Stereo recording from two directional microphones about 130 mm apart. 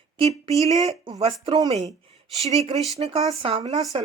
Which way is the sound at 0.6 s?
55° right (ahead or behind).